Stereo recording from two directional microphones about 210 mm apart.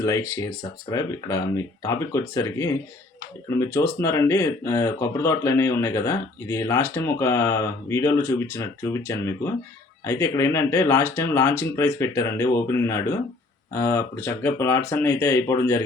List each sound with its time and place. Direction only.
0.0 s speech: 15° left (ahead or behind)